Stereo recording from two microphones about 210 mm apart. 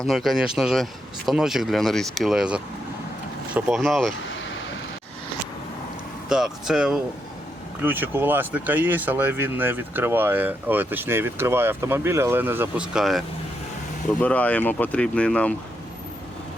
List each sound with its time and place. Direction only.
0.0 s speech: centre (ahead or behind)
6.2 s speech: 5° right (ahead or behind)